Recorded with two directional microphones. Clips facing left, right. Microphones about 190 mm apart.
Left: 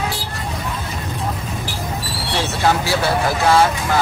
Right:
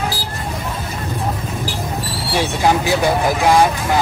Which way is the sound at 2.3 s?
15° right (ahead or behind).